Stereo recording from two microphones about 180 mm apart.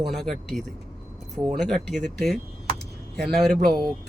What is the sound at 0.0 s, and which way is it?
A man's voice, centre (ahead or behind).